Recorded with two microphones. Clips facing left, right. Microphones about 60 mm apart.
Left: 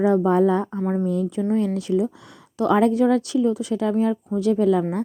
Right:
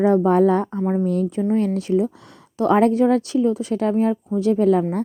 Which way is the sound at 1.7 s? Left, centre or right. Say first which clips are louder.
Right 2 dB; right.